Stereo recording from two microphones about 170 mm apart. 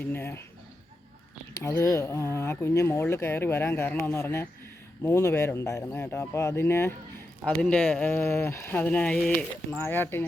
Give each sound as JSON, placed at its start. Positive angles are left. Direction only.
{"t": 0.0, "sound": "speech", "side_deg": 10}
{"t": 1.5, "sound": "speech", "side_deg": 15}